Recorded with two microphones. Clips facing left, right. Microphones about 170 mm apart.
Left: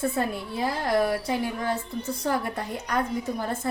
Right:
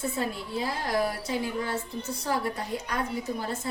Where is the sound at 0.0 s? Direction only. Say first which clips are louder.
Left 4 dB; 55° left (ahead or behind).